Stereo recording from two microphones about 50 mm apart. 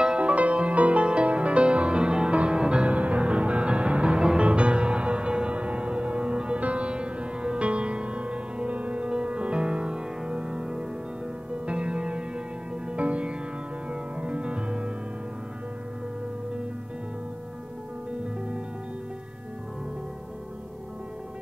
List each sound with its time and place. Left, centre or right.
0.0 s music: right